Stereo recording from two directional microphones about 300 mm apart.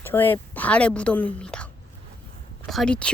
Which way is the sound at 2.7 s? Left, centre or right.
Centre.